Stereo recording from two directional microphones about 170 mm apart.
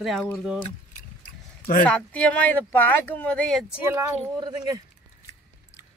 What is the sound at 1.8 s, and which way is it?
Speech, 10° left (ahead or behind).